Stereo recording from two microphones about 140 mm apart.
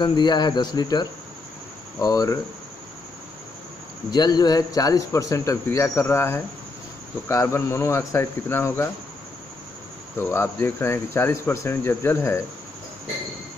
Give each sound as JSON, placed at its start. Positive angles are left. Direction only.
{"t": 0.0, "sound": "speech", "side_deg": 30}
{"t": 4.1, "sound": "speech", "side_deg": 30}
{"t": 10.1, "sound": "speech", "side_deg": 15}